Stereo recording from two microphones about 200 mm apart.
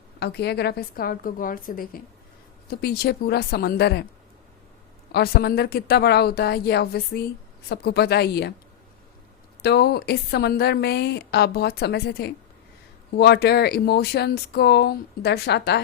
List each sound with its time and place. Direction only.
0.2 s a woman's voice: 55° left (ahead or behind)
5.1 s a woman's voice: 55° left (ahead or behind)
9.6 s a woman's voice: 55° left (ahead or behind)